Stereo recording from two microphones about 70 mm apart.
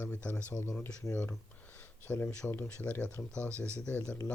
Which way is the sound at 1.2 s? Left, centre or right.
Left.